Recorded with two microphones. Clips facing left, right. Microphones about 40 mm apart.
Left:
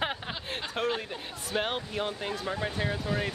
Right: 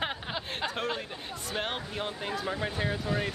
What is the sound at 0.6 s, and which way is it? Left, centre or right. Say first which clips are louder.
Speech: left 3 dB; centre.